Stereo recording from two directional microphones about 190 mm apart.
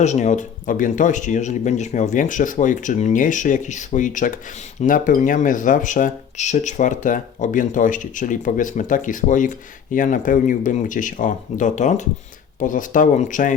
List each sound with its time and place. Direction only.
0.0 s speech: 35° left (ahead or behind)